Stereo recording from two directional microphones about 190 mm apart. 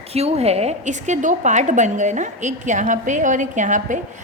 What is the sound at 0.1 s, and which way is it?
A woman's voice, 35° right (ahead or behind).